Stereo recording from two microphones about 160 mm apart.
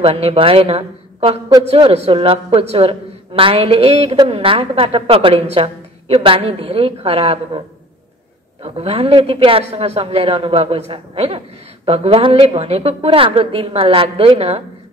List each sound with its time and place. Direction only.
0.0 s a woman's voice: 35° right (ahead or behind)
8.6 s a woman's voice: 40° right (ahead or behind)